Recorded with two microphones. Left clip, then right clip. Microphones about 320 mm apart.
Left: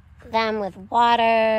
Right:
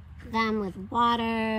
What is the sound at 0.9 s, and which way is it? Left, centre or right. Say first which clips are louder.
Speech: left 7 dB; left.